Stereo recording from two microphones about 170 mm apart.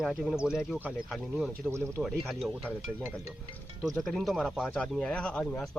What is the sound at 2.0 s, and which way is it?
Speech, centre (ahead or behind).